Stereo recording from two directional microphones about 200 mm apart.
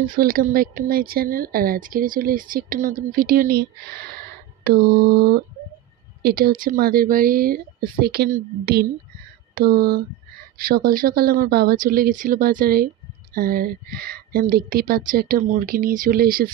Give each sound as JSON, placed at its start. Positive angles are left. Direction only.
{"t": 0.0, "sound": "speech", "side_deg": -45}